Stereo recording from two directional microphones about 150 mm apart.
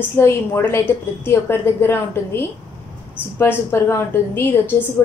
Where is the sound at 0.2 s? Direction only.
15° left (ahead or behind).